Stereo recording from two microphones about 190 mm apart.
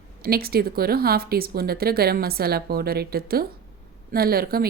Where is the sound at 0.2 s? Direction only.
55° right (ahead or behind).